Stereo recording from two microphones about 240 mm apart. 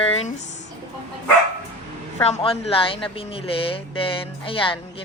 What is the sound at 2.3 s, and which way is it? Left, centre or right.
Speech, left.